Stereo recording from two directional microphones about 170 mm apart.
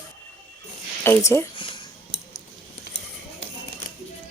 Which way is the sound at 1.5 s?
30° left (ahead or behind).